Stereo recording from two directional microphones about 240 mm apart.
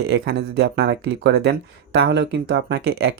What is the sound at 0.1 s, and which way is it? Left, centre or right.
Speech, right.